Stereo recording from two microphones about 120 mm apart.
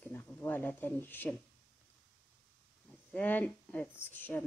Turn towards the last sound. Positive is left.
turn(degrees=15)  # may be behind; listen again after turning